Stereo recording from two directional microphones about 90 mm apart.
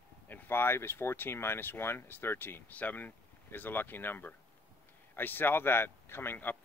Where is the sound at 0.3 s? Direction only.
20° left (ahead or behind).